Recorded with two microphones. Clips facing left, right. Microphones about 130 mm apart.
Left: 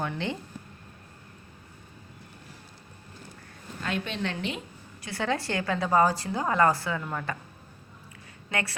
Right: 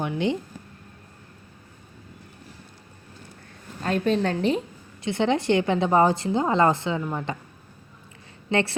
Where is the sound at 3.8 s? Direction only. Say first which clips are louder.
Right 9 dB; 40° right (ahead or behind).